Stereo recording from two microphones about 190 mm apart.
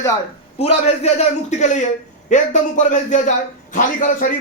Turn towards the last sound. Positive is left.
turn(degrees=45)  # may be behind; listen again after turning